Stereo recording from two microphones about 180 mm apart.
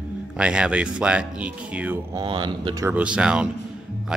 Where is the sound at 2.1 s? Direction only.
25° right (ahead or behind).